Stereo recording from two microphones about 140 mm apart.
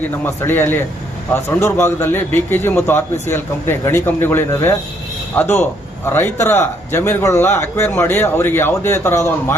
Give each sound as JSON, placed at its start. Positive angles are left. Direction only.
{"t": 0.4, "sound": "a man's voice", "side_deg": 15}